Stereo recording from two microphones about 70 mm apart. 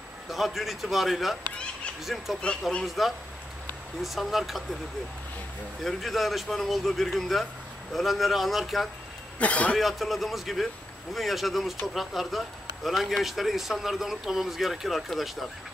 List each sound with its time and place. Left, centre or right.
0.3 s speech: centre
5.9 s speech: centre
9.4 s speech: centre
9.8 s speech: centre